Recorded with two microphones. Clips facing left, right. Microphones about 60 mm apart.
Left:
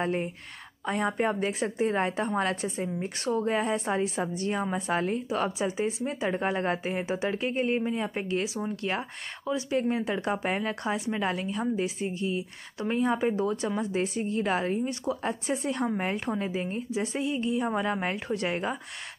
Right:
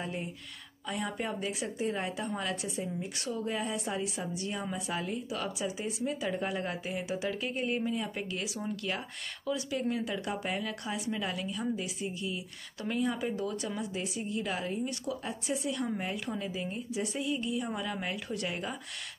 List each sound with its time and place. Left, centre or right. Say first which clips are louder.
0.0 s a woman's voice: left 8 dB; left